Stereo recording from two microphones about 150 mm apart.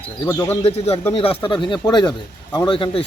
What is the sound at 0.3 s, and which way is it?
Speech, 15° left (ahead or behind).